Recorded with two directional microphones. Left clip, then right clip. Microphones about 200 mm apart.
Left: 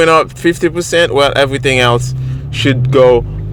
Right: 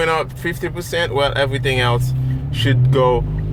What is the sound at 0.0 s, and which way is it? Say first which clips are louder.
Speech: left 9 dB; 45° left (ahead or behind).